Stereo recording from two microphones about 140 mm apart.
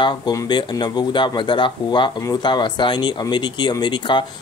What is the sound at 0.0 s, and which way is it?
Speech, 30° left (ahead or behind).